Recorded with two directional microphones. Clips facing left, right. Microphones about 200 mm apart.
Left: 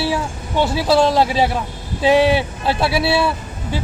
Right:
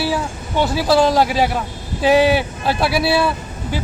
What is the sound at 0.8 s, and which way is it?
Speech, centre (ahead or behind).